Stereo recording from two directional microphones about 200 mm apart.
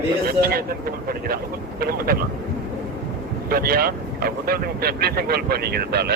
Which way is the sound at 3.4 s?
50° right (ahead or behind).